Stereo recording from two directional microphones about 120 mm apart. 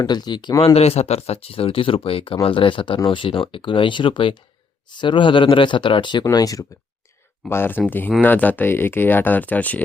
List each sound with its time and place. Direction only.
0.0 s speech: 35° left (ahead or behind)
0.6 s speech: 60° left (ahead or behind); by 6.7 s 30° left (ahead or behind)
7.5 s speech: 15° left (ahead or behind)